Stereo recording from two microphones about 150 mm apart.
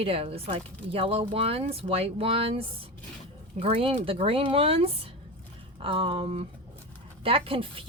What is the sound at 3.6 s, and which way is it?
Speech, 40° right (ahead or behind).